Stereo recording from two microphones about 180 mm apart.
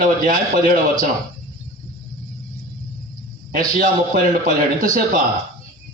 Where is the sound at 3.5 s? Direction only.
50° right (ahead or behind).